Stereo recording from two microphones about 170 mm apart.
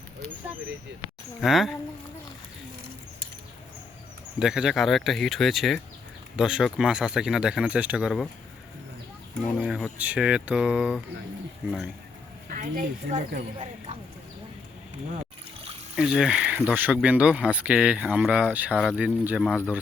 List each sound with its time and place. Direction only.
1.4 s speech: centre (ahead or behind)
4.4 s speech: 5° right (ahead or behind)
9.6 s speech: centre (ahead or behind)
12.5 s speech: 55° right (ahead or behind)
13.6 s speech: 35° right (ahead or behind)
16.0 s speech: 5° right (ahead or behind)